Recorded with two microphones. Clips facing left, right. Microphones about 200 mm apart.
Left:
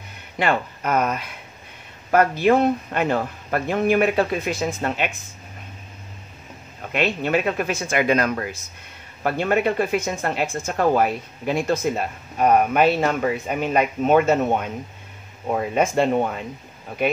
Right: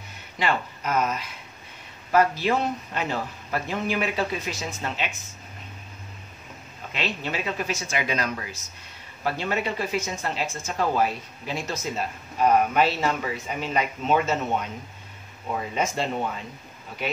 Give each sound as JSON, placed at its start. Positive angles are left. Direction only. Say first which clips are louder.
{"t": 0.4, "sound": "speech", "louder": "left 4 dB", "side_deg": 55}
{"t": 6.9, "sound": "speech", "louder": "left 9 dB", "side_deg": 55}